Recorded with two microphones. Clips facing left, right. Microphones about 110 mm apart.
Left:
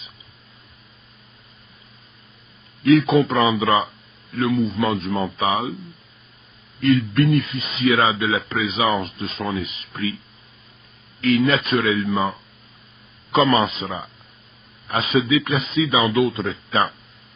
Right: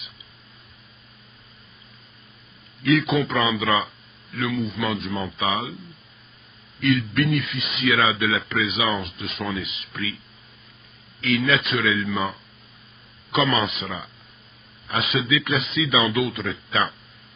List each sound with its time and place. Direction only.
2.8 s a man's voice: 30° left (ahead or behind)
6.8 s a man's voice: 35° left (ahead or behind)
11.3 s a man's voice: 35° left (ahead or behind)